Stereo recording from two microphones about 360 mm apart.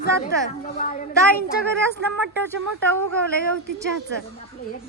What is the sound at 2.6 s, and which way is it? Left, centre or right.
Speech, right.